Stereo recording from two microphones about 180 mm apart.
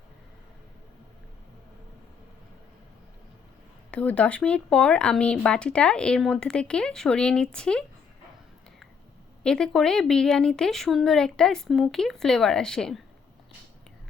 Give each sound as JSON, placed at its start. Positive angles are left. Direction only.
{"t": 3.9, "sound": "speech", "side_deg": 5}
{"t": 9.4, "sound": "speech", "side_deg": 5}